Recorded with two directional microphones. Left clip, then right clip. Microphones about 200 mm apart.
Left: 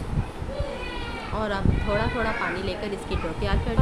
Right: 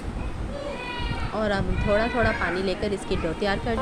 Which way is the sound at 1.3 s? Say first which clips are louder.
Right 2 dB; 15° right (ahead or behind).